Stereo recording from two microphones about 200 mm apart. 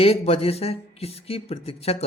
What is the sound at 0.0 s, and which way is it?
Speech, 30° left (ahead or behind).